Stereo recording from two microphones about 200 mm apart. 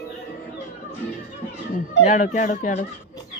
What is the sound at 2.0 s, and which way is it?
Speech, 35° left (ahead or behind).